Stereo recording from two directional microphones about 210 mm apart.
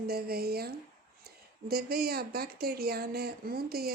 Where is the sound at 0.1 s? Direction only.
45° right (ahead or behind).